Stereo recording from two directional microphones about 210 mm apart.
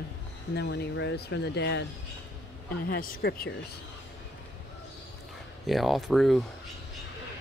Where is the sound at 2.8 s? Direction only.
45° left (ahead or behind).